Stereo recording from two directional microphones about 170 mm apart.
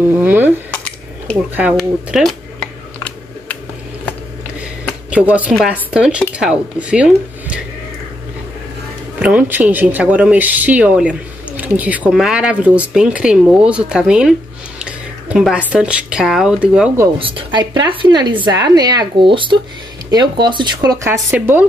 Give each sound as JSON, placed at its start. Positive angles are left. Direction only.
{"t": 0.2, "sound": "speech", "side_deg": -10}
{"t": 1.8, "sound": "a sound", "side_deg": 0}
{"t": 5.1, "sound": "speech", "side_deg": -10}
{"t": 9.2, "sound": "speech", "side_deg": -10}
{"t": 14.8, "sound": "a sound", "side_deg": -5}
{"t": 15.7, "sound": "speech", "side_deg": -5}
{"t": 17.2, "sound": "speech", "side_deg": -30}